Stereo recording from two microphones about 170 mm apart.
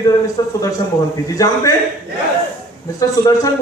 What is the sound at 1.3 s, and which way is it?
Speech, 20° left (ahead or behind).